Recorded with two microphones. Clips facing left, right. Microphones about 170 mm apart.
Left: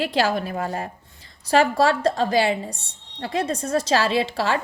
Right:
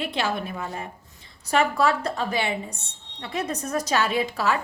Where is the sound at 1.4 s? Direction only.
35° left (ahead or behind).